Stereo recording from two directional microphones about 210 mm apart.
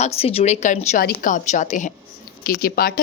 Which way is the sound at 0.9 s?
50° left (ahead or behind).